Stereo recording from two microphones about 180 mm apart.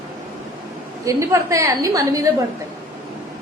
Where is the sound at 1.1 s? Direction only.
15° right (ahead or behind).